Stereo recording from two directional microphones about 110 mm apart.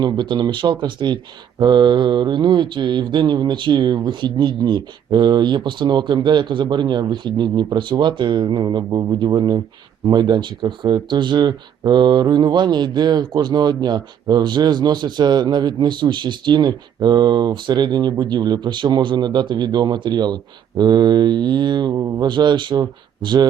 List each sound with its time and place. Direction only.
0.0 s speech: 45° right (ahead or behind)